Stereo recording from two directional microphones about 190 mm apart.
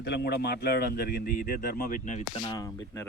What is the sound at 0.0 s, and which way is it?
Speech, 60° left (ahead or behind).